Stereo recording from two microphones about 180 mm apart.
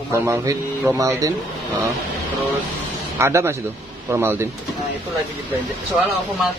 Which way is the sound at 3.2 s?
15° right (ahead or behind).